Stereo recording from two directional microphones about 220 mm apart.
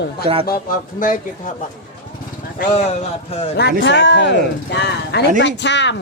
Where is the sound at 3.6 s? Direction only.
50° left (ahead or behind).